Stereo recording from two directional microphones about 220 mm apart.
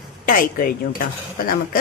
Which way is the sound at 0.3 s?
40° left (ahead or behind).